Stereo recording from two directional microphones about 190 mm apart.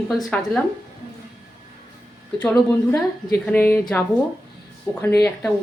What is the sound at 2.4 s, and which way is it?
Speech, 5° left (ahead or behind).